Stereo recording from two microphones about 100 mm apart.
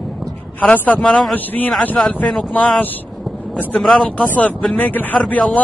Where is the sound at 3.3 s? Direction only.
Centre (ahead or behind).